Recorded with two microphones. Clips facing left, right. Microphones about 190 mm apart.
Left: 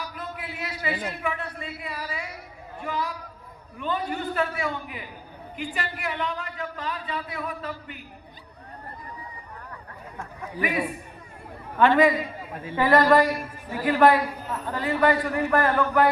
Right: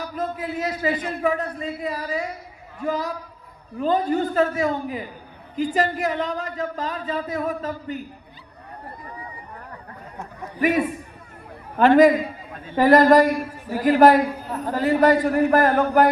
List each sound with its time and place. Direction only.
0.0 s speech: 45° right (ahead or behind)
10.6 s a man's voice: 45° right (ahead or behind)